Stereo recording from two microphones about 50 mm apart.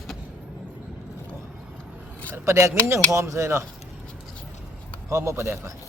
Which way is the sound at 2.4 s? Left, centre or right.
Right.